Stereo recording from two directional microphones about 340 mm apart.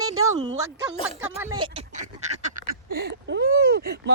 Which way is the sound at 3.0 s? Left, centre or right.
Right.